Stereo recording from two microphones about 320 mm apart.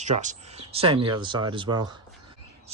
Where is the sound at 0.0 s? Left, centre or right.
Right.